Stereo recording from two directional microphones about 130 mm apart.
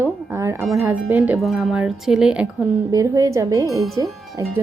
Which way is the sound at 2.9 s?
25° right (ahead or behind).